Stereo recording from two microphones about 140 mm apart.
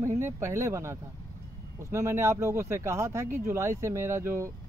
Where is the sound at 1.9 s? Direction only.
20° right (ahead or behind).